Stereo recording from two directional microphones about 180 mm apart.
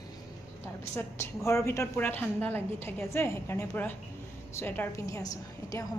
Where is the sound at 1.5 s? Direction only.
15° left (ahead or behind).